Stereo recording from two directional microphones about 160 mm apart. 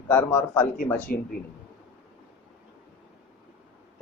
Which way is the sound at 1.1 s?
70° left (ahead or behind).